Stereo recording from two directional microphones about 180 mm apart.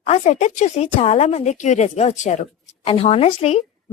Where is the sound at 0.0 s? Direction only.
40° left (ahead or behind).